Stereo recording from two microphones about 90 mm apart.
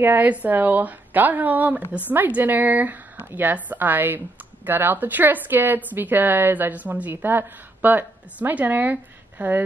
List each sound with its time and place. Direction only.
0.0 s a woman's voice: 20° right (ahead or behind)